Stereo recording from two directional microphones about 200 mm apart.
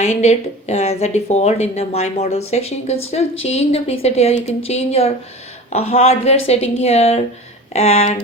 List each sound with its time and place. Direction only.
0.0 s speech: 35° left (ahead or behind)